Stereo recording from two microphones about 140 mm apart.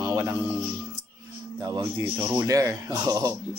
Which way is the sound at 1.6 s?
25° right (ahead or behind).